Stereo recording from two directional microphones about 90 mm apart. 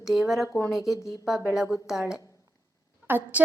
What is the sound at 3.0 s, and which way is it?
Speech, 20° right (ahead or behind).